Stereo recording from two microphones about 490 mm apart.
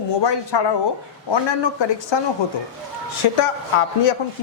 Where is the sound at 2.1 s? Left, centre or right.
Left.